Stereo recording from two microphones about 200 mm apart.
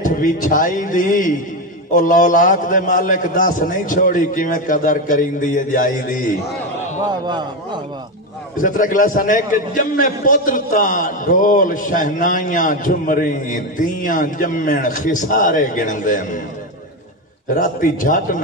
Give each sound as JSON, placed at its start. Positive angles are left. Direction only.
{"t": 0.0, "sound": "a man's voice", "side_deg": 40}
{"t": 7.1, "sound": "a man's voice", "side_deg": -20}
{"t": 8.5, "sound": "a man's voice", "side_deg": 40}
{"t": 17.6, "sound": "a man's voice", "side_deg": 45}